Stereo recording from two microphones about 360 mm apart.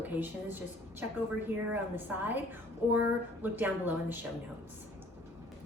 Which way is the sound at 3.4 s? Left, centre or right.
Centre.